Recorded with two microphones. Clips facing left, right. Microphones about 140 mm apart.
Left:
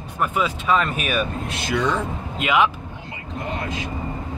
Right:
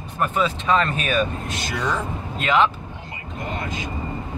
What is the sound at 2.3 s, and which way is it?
Speech, 10° left (ahead or behind).